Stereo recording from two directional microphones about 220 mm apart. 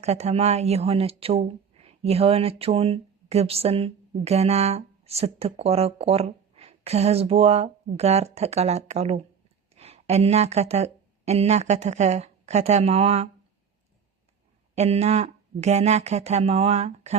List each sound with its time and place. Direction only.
0.0 s a woman's voice: 30° right (ahead or behind)
14.8 s speech: 30° right (ahead or behind)